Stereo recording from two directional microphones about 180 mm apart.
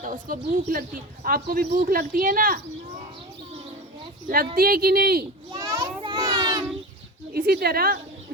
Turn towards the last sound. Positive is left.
turn(degrees=-55)  # may be behind; listen again after turning